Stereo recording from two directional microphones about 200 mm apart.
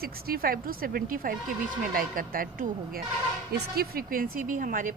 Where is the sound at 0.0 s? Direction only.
50° right (ahead or behind).